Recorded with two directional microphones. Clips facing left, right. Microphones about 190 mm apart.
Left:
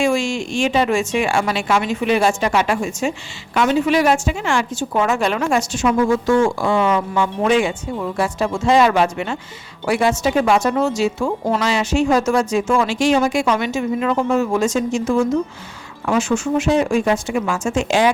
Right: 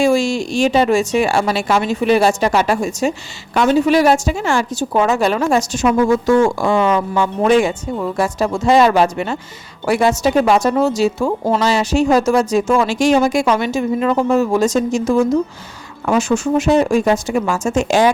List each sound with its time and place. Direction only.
0.0 s a woman's voice: 35° right (ahead or behind)